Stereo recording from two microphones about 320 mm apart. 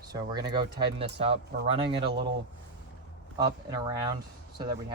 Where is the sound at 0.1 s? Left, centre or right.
Centre.